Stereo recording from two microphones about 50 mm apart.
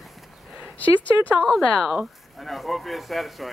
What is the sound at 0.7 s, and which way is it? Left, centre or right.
Speech, left.